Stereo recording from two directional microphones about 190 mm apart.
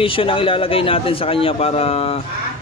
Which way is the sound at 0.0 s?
30° left (ahead or behind).